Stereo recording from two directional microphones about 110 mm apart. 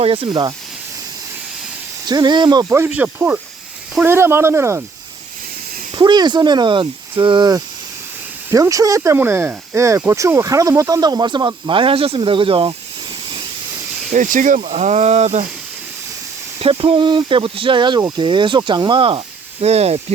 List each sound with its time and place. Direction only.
0.0 s speech: 55° right (ahead or behind)
2.0 s speech: 40° right (ahead or behind)
2.7 s speech: 15° right (ahead or behind)
5.9 s speech: 40° right (ahead or behind)
8.4 s speech: 30° right (ahead or behind); by 13.4 s 50° right (ahead or behind)
14.6 s speech: 90° right
16.6 s speech: 55° right (ahead or behind)
19.6 s speech: 70° right (ahead or behind)